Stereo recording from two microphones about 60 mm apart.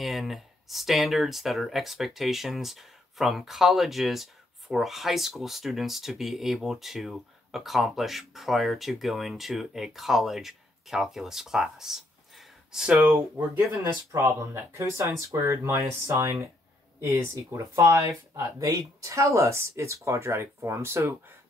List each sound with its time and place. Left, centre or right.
0.0 s speech: centre
14.1 s speech: right
17.0 s speech: right
17.3 s speech: right